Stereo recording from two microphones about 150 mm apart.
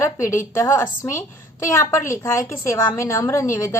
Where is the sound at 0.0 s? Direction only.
20° left (ahead or behind).